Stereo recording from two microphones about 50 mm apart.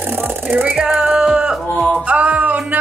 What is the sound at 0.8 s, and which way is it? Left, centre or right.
Music, centre.